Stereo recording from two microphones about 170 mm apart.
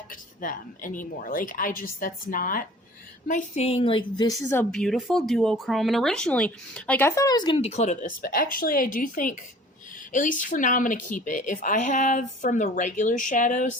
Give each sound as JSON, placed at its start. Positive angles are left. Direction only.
{"t": 0.1, "sound": "a woman's voice", "side_deg": 50}
{"t": 3.2, "sound": "a woman's voice", "side_deg": 45}
{"t": 4.4, "sound": "speech", "side_deg": 10}
{"t": 8.2, "sound": "a woman's voice", "side_deg": 60}